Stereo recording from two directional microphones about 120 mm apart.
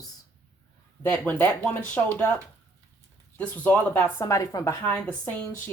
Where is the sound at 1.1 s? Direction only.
15° left (ahead or behind).